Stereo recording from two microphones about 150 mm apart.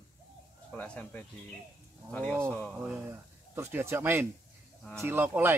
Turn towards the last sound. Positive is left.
turn(degrees=-15)  # may be behind; listen again after turning